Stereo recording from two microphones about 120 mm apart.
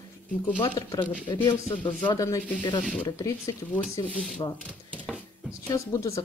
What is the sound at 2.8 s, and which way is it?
Speech, 10° left (ahead or behind).